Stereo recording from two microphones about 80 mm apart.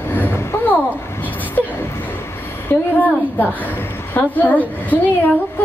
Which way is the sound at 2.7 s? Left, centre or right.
Left.